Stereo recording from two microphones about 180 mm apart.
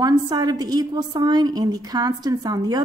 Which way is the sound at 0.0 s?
20° right (ahead or behind).